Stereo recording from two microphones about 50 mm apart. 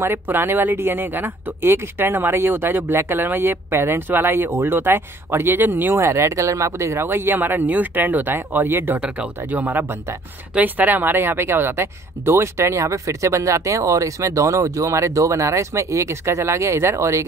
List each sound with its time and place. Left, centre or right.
0.0 s speech: right
1.7 s speech: right
5.9 s speech: right
7.1 s speech: right
9.0 s speech: right
9.5 s speech: right